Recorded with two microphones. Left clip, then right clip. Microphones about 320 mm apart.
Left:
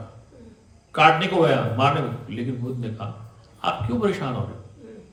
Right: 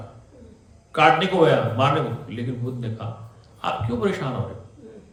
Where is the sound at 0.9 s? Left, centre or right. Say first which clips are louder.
Even; centre.